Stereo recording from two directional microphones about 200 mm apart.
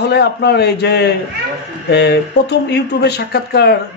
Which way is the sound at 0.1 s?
55° left (ahead or behind).